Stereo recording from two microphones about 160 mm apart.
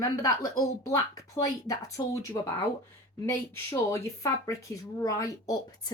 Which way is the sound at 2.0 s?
20° left (ahead or behind).